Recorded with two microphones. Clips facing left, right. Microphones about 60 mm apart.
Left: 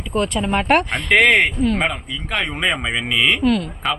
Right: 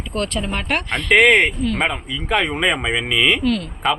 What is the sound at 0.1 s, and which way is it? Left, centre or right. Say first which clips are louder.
Speech: left 4 dB; centre.